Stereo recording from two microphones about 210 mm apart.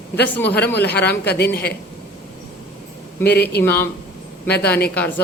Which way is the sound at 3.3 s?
50° left (ahead or behind).